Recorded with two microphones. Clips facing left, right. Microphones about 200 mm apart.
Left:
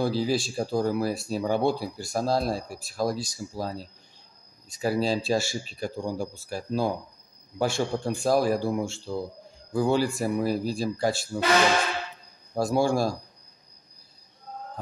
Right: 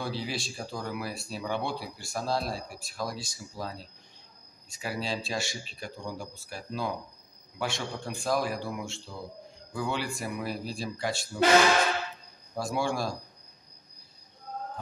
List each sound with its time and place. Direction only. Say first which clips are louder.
0.0 s speech: left 9 dB; 40° left (ahead or behind)
12.5 s speech: left 7 dB; 40° left (ahead or behind)